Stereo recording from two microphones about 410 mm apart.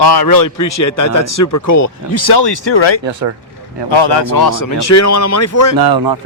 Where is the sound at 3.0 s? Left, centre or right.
Right.